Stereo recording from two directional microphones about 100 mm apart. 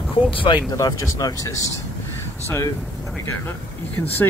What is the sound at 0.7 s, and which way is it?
Speech, 35° left (ahead or behind).